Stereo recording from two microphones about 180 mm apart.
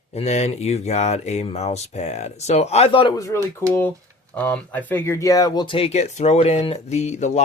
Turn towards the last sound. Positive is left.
turn(degrees=40)  # may be behind; listen again after turning